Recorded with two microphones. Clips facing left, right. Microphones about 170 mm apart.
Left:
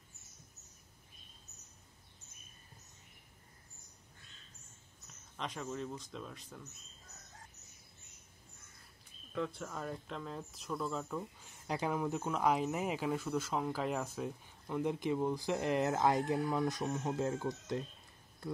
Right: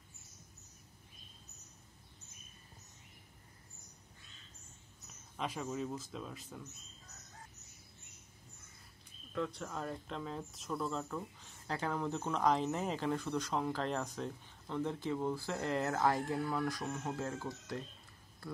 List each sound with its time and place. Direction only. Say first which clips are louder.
5.0 s speech: right 3 dB; 5° right (ahead or behind)
9.3 s speech: even; 5° left (ahead or behind)
11.6 s speech: left 2 dB; 15° left (ahead or behind)